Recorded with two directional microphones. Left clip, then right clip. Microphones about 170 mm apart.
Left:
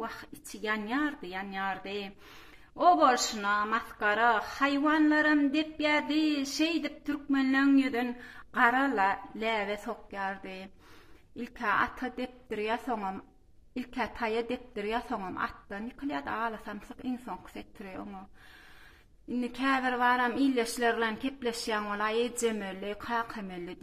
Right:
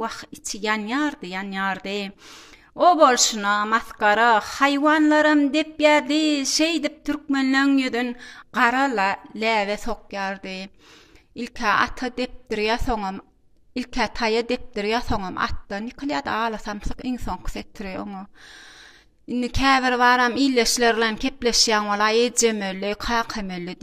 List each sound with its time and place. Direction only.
0.0 s a woman's voice: 45° right (ahead or behind)
19.4 s a woman's voice: 45° right (ahead or behind)